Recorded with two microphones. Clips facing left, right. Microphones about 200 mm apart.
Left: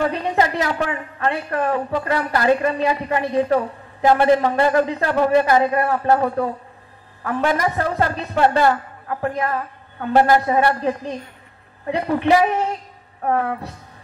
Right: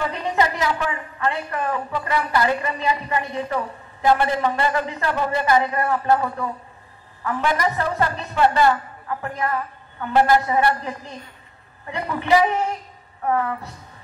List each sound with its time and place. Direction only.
0.0 s a woman's voice: 55° left (ahead or behind)